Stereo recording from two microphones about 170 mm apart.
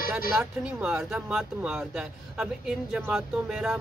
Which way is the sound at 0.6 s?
5° right (ahead or behind).